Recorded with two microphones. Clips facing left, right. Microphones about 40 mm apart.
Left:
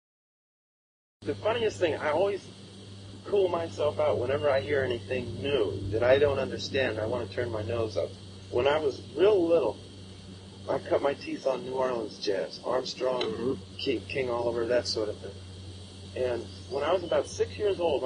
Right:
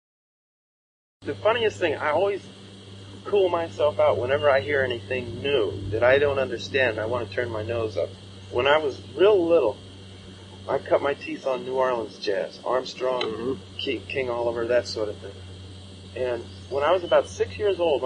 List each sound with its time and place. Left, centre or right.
1.2 s speech: right
3.3 s speech: right
8.5 s speech: right
16.2 s speech: right
16.8 s speech: right
17.6 s speech: right